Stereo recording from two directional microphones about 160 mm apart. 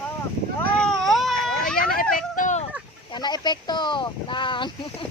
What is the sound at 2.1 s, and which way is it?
Speech, 50° left (ahead or behind).